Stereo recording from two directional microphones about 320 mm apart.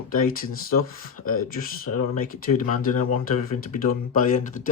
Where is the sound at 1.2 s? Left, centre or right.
Left.